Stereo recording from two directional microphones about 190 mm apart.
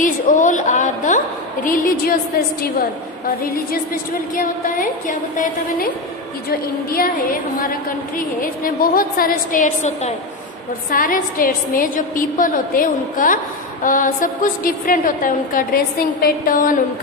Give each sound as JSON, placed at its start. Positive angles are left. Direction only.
{"t": 0.0, "sound": "a woman's voice", "side_deg": 40}
{"t": 4.4, "sound": "a woman's voice", "side_deg": 45}
{"t": 8.2, "sound": "a woman's voice", "side_deg": 45}